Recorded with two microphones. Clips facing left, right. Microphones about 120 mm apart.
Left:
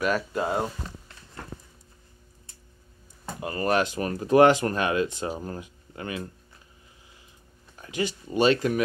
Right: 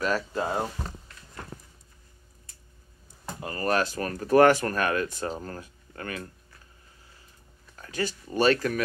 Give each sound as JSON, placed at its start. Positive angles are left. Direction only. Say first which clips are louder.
{"t": 0.0, "sound": "speech", "louder": "left 2 dB", "side_deg": 15}
{"t": 3.3, "sound": "speech", "louder": "left 2 dB", "side_deg": 20}
{"t": 7.7, "sound": "speech", "louder": "left 2 dB", "side_deg": 15}